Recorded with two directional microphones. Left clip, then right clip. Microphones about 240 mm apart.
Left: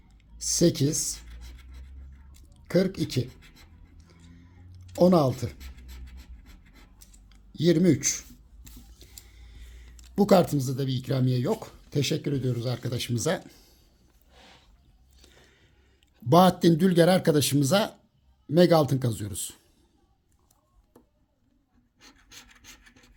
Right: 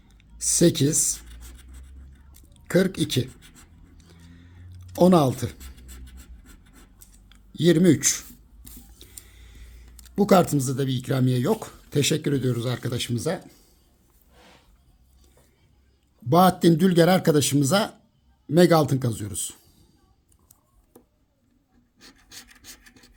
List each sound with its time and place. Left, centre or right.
0.2 s speech: centre
2.6 s speech: centre
3.4 s writing: right
3.9 s a sound: centre
5.5 s writing: right
7.3 s speech: centre
9.0 s a sound: centre
10.2 s speech: centre
13.1 s speech: centre
16.3 s speech: centre
22.4 s rub: right